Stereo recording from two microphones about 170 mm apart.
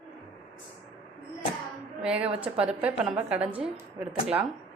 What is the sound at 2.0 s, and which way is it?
A woman's voice, 5° right (ahead or behind).